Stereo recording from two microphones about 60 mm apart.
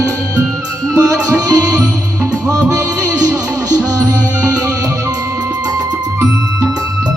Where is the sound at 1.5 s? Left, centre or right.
Right.